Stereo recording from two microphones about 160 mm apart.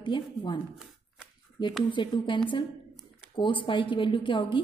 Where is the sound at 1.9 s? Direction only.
30° left (ahead or behind).